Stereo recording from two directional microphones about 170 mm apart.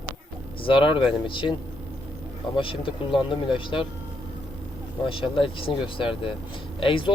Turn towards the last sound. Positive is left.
turn(degrees=30)  # may be behind; listen again after turning